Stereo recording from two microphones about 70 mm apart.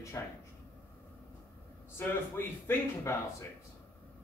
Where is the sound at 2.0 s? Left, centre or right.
Left.